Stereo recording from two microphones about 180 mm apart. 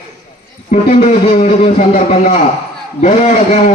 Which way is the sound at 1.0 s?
40° left (ahead or behind).